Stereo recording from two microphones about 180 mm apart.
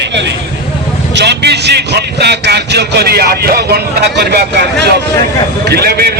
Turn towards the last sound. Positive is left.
turn(degrees=-60)  # may be behind; listen again after turning